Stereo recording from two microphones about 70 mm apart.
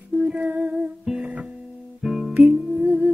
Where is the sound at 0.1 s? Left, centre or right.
Centre.